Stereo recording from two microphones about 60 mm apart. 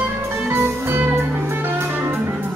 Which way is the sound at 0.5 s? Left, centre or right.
Right.